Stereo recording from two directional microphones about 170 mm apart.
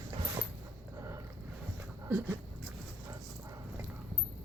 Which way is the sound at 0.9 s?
20° right (ahead or behind).